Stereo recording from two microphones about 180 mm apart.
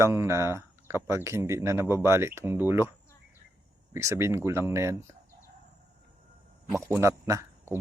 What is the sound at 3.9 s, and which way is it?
Speech, 15° right (ahead or behind).